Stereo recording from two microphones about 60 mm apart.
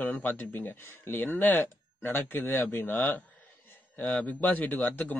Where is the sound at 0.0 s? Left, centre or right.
Left.